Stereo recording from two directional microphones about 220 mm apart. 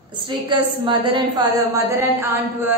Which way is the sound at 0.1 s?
20° right (ahead or behind).